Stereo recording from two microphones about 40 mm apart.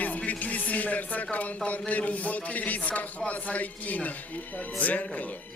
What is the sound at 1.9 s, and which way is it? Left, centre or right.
A man's voice, left.